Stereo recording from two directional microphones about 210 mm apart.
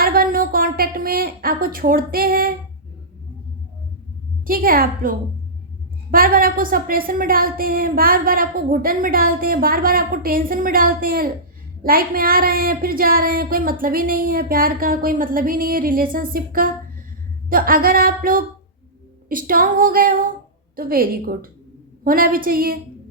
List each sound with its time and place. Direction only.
0.0 s a sound: 45° right (ahead or behind)
4.4 s a woman's voice: 45° right (ahead or behind)
19.3 s female singing: 40° right (ahead or behind)
20.7 s a woman's voice: 45° right (ahead or behind)